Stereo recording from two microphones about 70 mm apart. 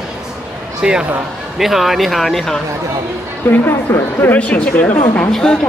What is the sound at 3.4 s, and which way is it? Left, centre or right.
Speech, left.